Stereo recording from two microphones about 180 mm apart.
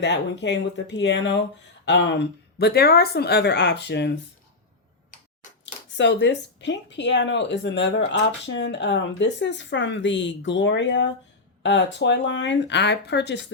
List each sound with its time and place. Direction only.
0.0 s speech: 75° left (ahead or behind)
6.0 s speech: 75° left (ahead or behind)